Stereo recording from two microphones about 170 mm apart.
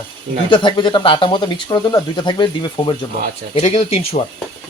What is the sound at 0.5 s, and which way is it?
Speech, 30° left (ahead or behind).